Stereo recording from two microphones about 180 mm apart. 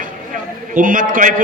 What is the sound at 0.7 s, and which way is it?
Speech, 50° right (ahead or behind).